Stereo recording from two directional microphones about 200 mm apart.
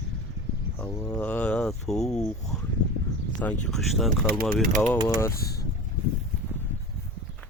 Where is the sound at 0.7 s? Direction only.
15° left (ahead or behind).